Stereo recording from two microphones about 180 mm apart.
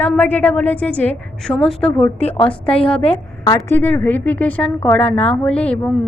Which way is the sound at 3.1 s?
20° left (ahead or behind).